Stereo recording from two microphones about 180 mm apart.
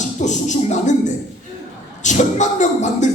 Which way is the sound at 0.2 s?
40° left (ahead or behind).